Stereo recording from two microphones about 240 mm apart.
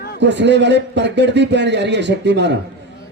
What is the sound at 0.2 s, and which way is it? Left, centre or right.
A man's voice, right.